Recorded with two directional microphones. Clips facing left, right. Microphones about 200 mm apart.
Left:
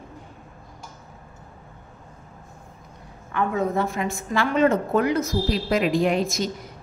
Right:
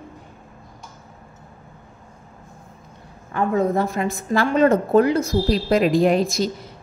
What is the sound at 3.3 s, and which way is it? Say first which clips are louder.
A woman's voice: right 4 dB; 35° right (ahead or behind).